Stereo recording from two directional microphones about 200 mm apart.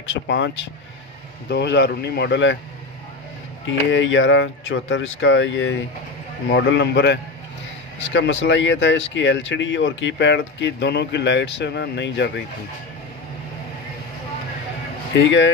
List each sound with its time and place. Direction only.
0.0 s speech: 65° left (ahead or behind)
3.6 s speech: 70° left (ahead or behind)
6.5 s speech: 60° left (ahead or behind)
15.1 s speech: 65° left (ahead or behind)